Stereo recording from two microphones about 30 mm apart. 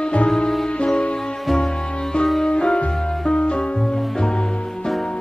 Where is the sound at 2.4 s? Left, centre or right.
Left.